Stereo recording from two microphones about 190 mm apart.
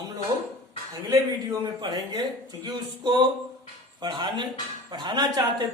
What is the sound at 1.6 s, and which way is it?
Speech, 25° right (ahead or behind).